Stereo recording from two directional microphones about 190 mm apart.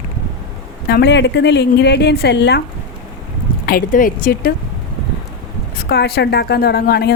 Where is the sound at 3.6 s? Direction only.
50° left (ahead or behind).